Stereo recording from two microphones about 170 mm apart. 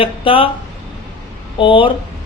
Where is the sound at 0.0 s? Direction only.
30° left (ahead or behind).